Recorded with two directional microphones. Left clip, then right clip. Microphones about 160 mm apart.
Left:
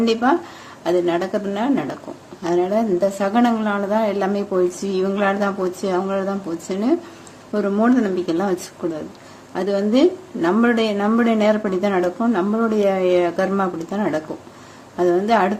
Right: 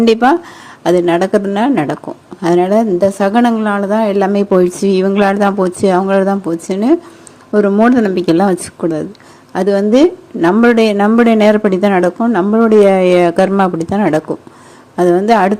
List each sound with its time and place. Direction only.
0.0 s a woman's voice: 50° right (ahead or behind)